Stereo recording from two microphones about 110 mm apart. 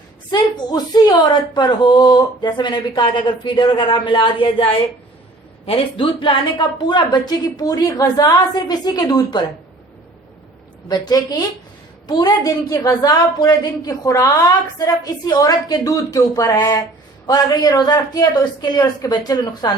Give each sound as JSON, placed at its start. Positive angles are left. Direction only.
{"t": 0.3, "sound": "a woman's voice", "side_deg": 40}
{"t": 10.8, "sound": "a woman's voice", "side_deg": 40}